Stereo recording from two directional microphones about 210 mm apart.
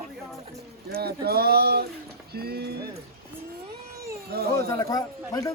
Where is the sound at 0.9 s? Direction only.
50° right (ahead or behind).